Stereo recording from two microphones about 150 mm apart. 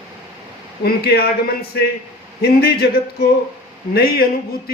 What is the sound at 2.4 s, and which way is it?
A man's voice, 90° left.